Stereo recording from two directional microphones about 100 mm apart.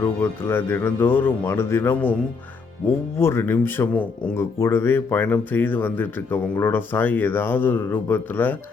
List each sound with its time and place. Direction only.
0.0 s speech: 20° left (ahead or behind)
3.2 s speech: 25° left (ahead or behind)